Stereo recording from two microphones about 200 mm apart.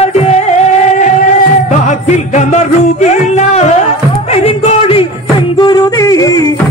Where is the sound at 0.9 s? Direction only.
40° left (ahead or behind).